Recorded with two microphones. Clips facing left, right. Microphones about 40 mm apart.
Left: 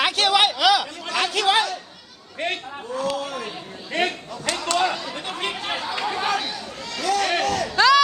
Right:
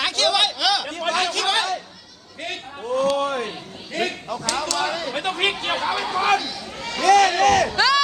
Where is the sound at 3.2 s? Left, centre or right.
Right.